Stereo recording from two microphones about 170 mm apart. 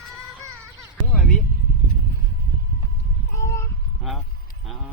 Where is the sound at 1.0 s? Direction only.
Centre (ahead or behind).